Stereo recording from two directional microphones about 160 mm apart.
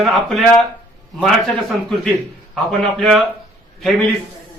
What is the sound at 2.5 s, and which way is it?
Speech, centre (ahead or behind).